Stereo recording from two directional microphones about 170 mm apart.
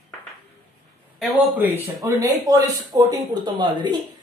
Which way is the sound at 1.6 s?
15° right (ahead or behind).